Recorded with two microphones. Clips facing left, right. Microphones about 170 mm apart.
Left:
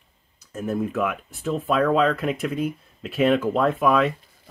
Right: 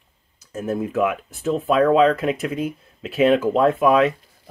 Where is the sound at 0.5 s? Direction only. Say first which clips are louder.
Right 2 dB; 5° right (ahead or behind).